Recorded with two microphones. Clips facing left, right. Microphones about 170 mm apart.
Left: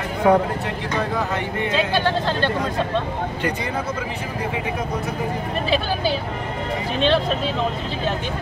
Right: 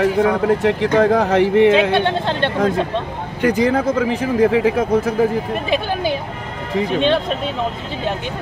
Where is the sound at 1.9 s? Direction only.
25° right (ahead or behind).